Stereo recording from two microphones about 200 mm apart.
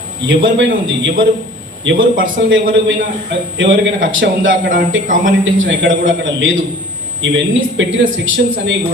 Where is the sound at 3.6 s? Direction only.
70° right (ahead or behind).